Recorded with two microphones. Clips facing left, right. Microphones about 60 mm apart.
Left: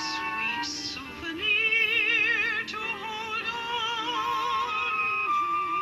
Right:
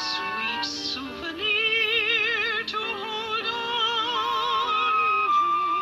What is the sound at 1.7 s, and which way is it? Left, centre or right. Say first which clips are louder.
Music: right 1 dB; left.